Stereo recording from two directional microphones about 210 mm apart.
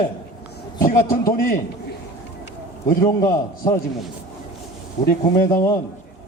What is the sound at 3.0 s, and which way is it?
Speech, 15° left (ahead or behind).